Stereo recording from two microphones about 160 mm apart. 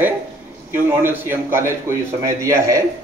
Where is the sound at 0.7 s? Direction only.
15° right (ahead or behind).